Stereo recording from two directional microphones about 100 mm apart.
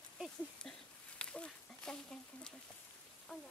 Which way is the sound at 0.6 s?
10° left (ahead or behind).